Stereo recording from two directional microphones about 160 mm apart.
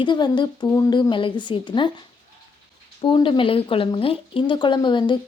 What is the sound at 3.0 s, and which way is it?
A woman's voice, 30° left (ahead or behind).